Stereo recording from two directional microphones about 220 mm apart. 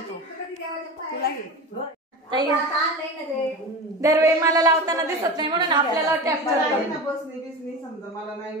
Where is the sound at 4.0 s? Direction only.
15° right (ahead or behind).